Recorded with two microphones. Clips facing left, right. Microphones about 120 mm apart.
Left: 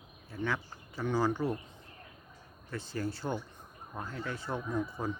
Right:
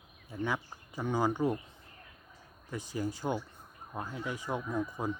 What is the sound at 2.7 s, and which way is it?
Speech, 15° right (ahead or behind).